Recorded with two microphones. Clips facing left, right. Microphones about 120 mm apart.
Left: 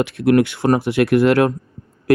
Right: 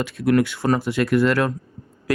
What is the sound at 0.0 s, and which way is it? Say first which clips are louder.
Speech: left 4 dB; 65° left (ahead or behind).